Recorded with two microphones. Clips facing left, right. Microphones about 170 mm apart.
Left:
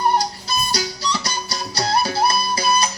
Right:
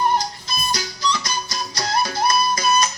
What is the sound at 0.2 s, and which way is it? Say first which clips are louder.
Music: left 4 dB; 35° left (ahead or behind).